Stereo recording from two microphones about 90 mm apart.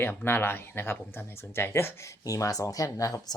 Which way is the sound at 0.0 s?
25° left (ahead or behind).